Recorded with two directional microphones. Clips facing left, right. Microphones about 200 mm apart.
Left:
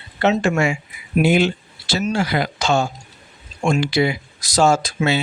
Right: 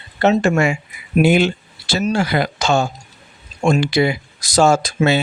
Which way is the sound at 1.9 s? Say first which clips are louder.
Right 2 dB; 45° right (ahead or behind).